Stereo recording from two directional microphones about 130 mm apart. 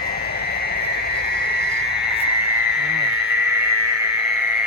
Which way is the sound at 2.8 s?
10° right (ahead or behind).